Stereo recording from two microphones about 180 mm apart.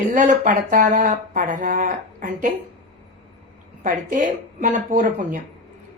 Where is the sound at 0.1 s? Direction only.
45° right (ahead or behind).